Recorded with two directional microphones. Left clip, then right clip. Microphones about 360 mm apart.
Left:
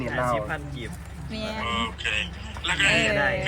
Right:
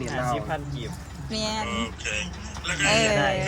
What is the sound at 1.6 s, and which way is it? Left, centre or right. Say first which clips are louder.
Speech: left 3 dB; centre.